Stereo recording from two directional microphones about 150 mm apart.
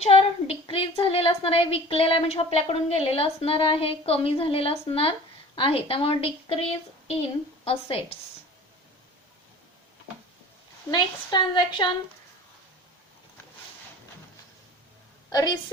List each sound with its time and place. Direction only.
0.0 s a woman's voice: 45° left (ahead or behind)
10.9 s a woman's voice: 30° left (ahead or behind)
15.3 s a woman's voice: 25° left (ahead or behind)